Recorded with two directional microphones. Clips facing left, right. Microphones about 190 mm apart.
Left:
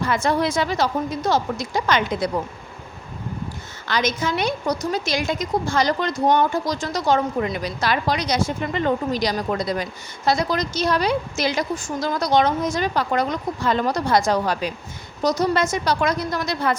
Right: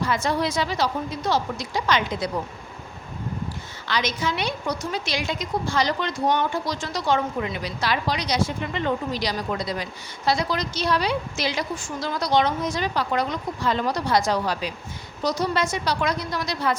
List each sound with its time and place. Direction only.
0.0 s a woman's voice: 55° left (ahead or behind)
3.8 s a woman's voice: 45° left (ahead or behind)